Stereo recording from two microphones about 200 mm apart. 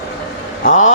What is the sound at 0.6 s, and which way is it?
Speech, 40° left (ahead or behind).